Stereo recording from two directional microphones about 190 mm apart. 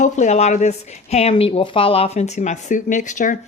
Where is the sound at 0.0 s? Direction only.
35° left (ahead or behind).